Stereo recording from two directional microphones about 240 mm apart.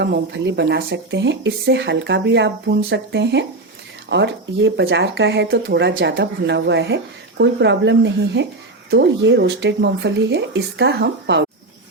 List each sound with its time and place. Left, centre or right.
0.0 s speech: right